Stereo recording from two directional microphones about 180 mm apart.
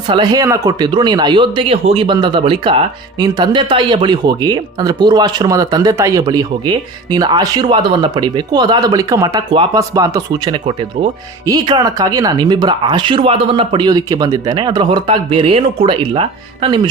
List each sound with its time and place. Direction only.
0.1 s speech: 25° right (ahead or behind)